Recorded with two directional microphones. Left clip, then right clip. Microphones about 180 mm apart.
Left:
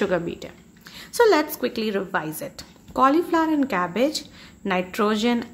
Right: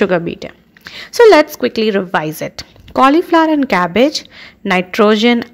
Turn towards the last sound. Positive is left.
turn(degrees=-40)  # may be behind; listen again after turning